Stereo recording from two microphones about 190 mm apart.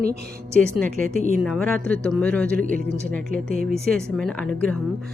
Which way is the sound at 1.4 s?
5° left (ahead or behind).